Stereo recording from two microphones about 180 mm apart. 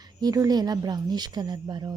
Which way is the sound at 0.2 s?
20° right (ahead or behind).